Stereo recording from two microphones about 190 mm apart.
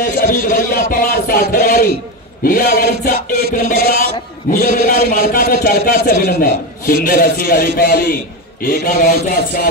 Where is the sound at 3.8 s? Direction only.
60° right (ahead or behind).